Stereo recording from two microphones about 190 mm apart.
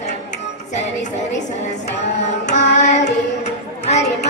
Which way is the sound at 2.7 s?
35° left (ahead or behind).